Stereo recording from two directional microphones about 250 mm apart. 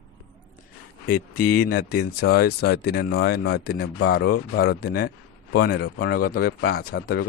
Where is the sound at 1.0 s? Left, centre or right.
Left.